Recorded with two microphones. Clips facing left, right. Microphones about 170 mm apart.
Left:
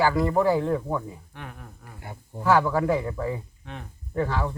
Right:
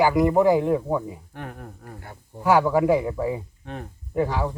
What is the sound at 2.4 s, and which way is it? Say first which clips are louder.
Speech: right 3 dB; 15° right (ahead or behind).